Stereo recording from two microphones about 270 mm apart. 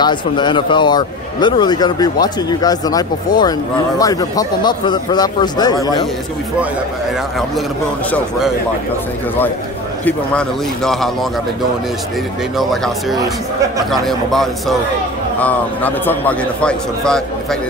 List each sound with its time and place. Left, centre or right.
0.0 s a man's voice: centre
8.1 s a man's voice: centre
10.0 s a man's voice: centre
12.5 s a man's voice: centre